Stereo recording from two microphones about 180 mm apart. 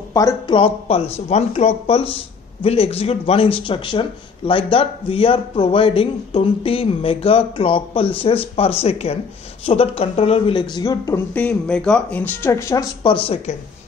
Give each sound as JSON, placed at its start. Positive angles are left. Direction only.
{"t": 0.1, "sound": "speech", "side_deg": 20}